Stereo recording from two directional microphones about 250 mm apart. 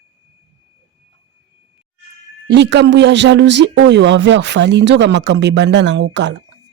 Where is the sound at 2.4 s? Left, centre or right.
Right.